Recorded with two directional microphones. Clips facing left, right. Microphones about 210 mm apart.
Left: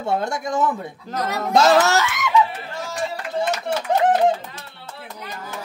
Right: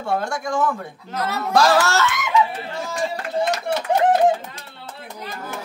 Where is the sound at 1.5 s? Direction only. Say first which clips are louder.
Left 2 dB; 20° left (ahead or behind).